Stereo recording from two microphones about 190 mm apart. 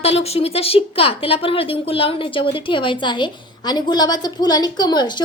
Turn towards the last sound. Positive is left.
turn(degrees=20)  # may be behind; listen again after turning